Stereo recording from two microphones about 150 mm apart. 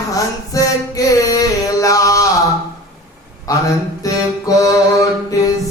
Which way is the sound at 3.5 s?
25° left (ahead or behind).